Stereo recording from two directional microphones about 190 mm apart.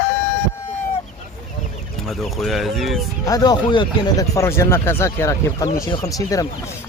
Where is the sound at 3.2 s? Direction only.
20° left (ahead or behind).